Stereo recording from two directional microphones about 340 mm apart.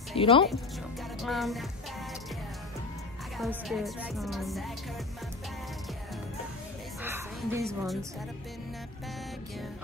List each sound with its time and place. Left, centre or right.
0.1 s speech: centre
1.2 s speech: centre
3.3 s speech: centre
7.0 s music: centre